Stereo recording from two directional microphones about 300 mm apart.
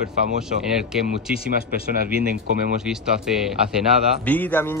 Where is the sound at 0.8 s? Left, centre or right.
Centre.